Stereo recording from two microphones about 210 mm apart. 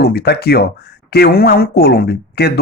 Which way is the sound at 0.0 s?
50° left (ahead or behind).